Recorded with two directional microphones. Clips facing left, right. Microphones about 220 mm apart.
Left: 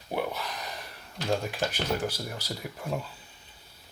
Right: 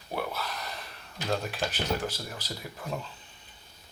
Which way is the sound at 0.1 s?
15° left (ahead or behind).